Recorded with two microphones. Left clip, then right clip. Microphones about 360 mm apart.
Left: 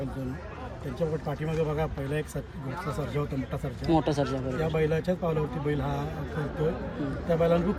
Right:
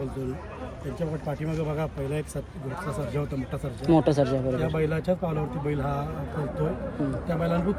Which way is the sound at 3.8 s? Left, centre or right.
Centre.